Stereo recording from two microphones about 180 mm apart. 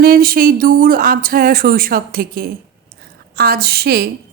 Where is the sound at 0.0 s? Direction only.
55° right (ahead or behind).